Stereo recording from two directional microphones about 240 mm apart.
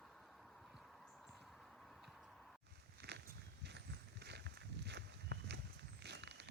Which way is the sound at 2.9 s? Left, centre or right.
Right.